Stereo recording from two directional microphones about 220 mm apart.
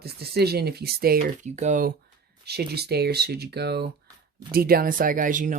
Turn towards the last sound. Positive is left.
turn(degrees=-35)  # may be behind; listen again after turning